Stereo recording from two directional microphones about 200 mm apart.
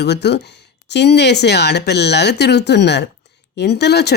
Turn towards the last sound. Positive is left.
turn(degrees=55)  # may be behind; listen again after turning